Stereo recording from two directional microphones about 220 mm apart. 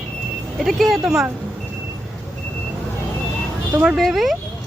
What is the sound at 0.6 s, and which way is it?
Speech, centre (ahead or behind).